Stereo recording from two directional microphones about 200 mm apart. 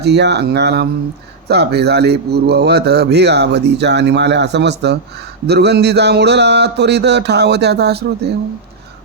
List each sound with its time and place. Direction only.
0.0 s a man's voice: 55° right (ahead or behind)